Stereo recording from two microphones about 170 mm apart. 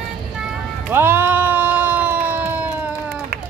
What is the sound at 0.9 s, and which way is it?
Sheep, 15° right (ahead or behind).